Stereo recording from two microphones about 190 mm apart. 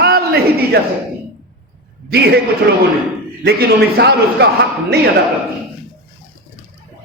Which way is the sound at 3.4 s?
55° right (ahead or behind).